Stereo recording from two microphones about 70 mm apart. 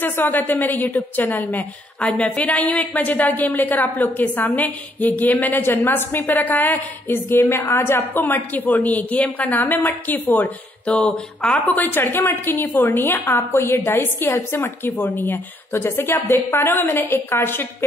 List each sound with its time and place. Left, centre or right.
0.0 s a woman's voice: left